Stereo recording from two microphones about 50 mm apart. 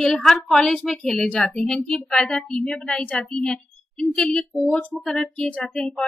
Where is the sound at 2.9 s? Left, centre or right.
Left.